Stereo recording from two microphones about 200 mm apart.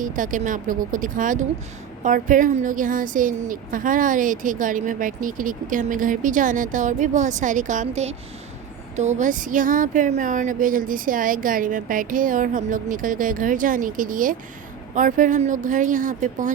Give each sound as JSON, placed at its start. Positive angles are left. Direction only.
{"t": 0.0, "sound": "a woman's voice", "side_deg": -40}